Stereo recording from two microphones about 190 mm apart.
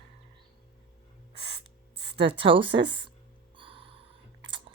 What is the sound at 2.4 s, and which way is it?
Speech, 25° right (ahead or behind).